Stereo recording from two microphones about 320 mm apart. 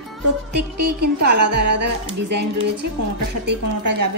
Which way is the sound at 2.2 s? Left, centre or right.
Right.